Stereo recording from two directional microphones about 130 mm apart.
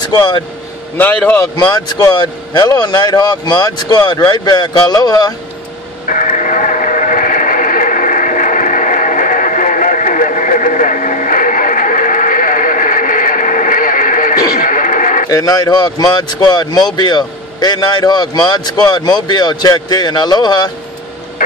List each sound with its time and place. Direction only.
0.0 s speech: 35° left (ahead or behind)
0.9 s a man's voice: 10° left (ahead or behind)
1.7 s speech: 30° left (ahead or behind)
6.0 s a sound: 80° left
14.6 s music: 85° left
15.2 s a man's voice: 30° left (ahead or behind)